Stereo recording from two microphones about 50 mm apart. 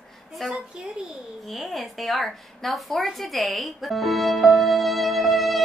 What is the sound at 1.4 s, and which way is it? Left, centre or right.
A woman's voice, centre.